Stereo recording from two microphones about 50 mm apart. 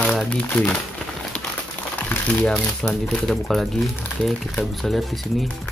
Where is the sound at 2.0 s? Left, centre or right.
Left.